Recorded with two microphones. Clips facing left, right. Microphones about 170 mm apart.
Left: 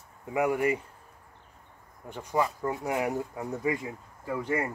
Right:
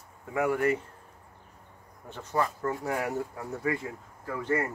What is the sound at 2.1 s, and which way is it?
Speech, 15° left (ahead or behind).